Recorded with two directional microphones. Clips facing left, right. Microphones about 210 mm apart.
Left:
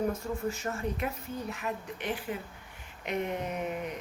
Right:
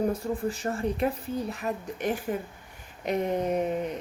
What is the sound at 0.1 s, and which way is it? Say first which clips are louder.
A woman's voice: right 4 dB; 35° right (ahead or behind).